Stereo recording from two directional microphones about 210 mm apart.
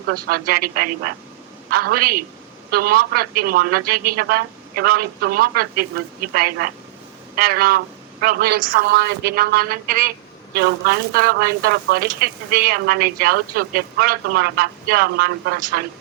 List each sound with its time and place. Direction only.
0.1 s speech: 45° right (ahead or behind)